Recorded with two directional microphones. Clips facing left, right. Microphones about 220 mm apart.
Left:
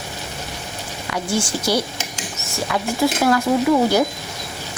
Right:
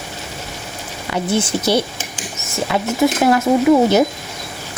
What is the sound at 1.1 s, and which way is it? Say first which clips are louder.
Speech: right 4 dB; 20° right (ahead or behind).